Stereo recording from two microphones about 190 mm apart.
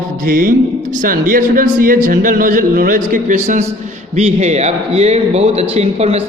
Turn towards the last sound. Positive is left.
turn(degrees=-35)  # may be behind; listen again after turning